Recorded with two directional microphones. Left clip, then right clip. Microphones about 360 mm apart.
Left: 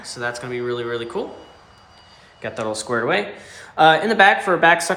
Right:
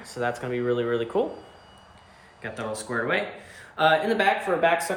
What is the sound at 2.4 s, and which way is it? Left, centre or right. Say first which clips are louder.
Speech: left 7 dB; centre.